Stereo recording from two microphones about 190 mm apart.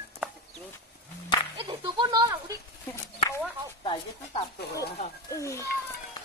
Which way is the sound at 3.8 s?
30° left (ahead or behind).